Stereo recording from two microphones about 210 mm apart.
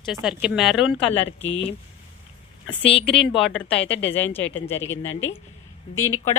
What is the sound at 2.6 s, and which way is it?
Speech, 25° left (ahead or behind).